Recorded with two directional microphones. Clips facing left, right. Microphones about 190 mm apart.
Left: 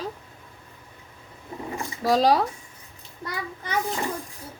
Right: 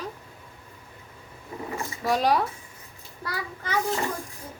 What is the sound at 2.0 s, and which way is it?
Speech, 35° left (ahead or behind).